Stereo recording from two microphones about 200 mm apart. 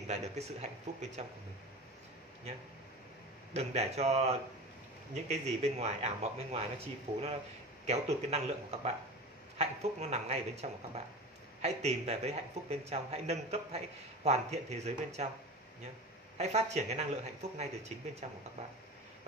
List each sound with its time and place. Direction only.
0.0 s speech: 35° right (ahead or behind)
3.5 s speech: 30° right (ahead or behind)
16.3 s speech: 35° right (ahead or behind)